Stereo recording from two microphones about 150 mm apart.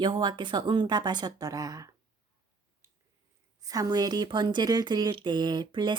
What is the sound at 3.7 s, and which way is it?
Speech, 25° right (ahead or behind).